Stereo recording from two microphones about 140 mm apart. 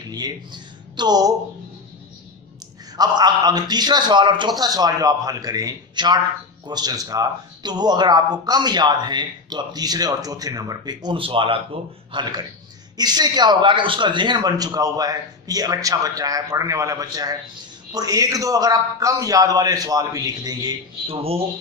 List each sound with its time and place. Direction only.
0.1 s speech: 30° right (ahead or behind)
3.0 s speech: 30° right (ahead or behind)
21.1 s speech: 45° right (ahead or behind)